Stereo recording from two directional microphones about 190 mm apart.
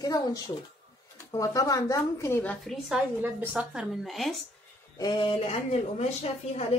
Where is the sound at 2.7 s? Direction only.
10° right (ahead or behind).